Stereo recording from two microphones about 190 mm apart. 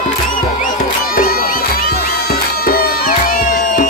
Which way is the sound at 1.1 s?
50° left (ahead or behind).